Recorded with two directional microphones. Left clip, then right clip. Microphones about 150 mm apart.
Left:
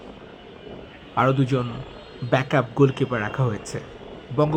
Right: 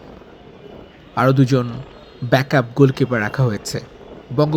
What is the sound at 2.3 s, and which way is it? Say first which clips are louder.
Speech: right 5 dB; 30° right (ahead or behind).